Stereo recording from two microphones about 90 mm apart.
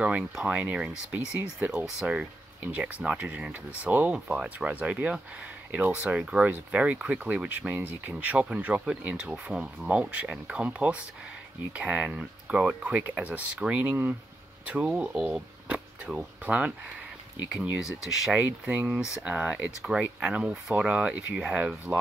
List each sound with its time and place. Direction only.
0.0 s speech: 15° right (ahead or behind)
18.0 s speech: 5° right (ahead or behind)
18.4 s speech: 15° right (ahead or behind)